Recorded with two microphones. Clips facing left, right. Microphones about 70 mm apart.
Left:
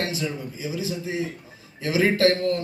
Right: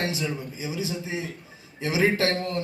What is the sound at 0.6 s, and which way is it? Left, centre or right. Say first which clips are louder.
A man's voice: left 3 dB; right.